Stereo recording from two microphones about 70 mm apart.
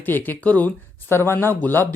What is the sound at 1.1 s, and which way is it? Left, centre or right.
Speech, left.